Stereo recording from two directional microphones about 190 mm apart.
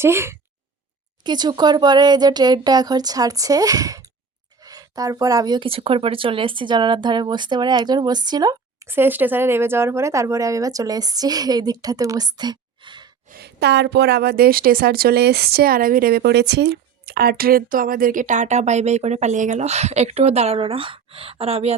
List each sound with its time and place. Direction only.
0.0 s speech: 15° right (ahead or behind)
13.2 s a woman's voice: 55° right (ahead or behind); by 21.8 s 30° right (ahead or behind)